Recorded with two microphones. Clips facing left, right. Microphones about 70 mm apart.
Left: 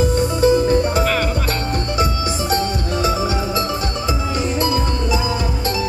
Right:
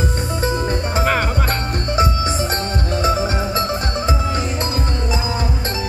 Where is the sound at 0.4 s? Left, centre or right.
Right.